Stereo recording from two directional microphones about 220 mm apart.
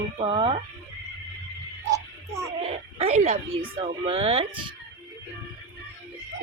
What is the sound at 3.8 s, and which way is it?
Speech, 25° right (ahead or behind).